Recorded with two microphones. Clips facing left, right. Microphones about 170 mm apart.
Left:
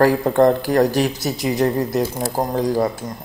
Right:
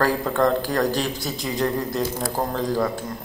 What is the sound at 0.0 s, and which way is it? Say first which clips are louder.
Speech: left 6 dB; 20° left (ahead or behind).